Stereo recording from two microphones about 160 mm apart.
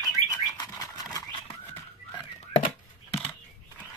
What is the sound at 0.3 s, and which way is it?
Bird flight, 20° left (ahead or behind).